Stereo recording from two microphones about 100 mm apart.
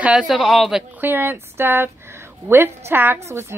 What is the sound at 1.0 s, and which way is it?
A woman's voice, 20° right (ahead or behind).